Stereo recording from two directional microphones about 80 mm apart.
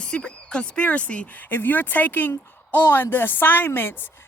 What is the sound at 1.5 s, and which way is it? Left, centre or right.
Speech, left.